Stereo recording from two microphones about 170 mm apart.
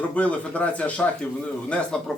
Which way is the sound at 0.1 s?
10° left (ahead or behind).